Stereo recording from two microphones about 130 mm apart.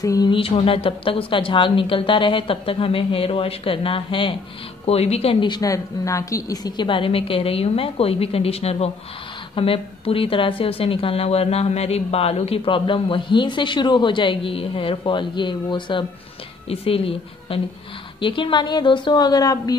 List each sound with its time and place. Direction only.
0.0 s a sound: 25° left (ahead or behind)
0.3 s a woman's voice: 45° left (ahead or behind)
4.8 s a woman's voice: 55° left (ahead or behind); by 19.8 s 30° left (ahead or behind)